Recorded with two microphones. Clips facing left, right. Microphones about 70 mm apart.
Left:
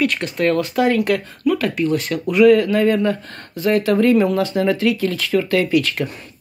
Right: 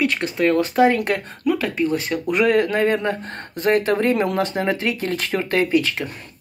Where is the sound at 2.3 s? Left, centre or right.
Right.